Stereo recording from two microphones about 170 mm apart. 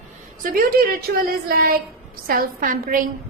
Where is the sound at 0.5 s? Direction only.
60° right (ahead or behind).